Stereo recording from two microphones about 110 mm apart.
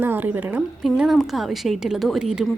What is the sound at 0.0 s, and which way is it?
Speech, 20° right (ahead or behind).